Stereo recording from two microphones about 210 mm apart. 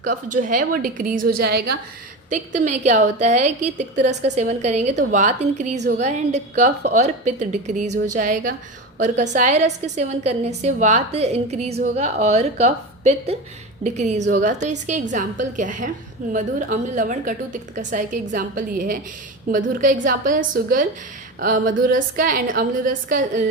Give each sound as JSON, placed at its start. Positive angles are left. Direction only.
{"t": 0.0, "sound": "a woman's voice", "side_deg": -35}
{"t": 2.3, "sound": "a woman's voice", "side_deg": -35}